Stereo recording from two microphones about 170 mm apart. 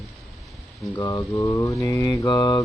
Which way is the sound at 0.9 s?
20° left (ahead or behind).